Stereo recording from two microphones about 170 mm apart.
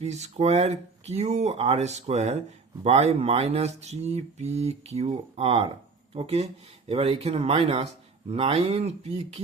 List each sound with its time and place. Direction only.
0.0 s speech: 40° right (ahead or behind)